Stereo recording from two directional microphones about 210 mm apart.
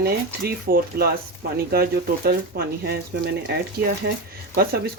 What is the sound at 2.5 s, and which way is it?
Speech, 50° right (ahead or behind).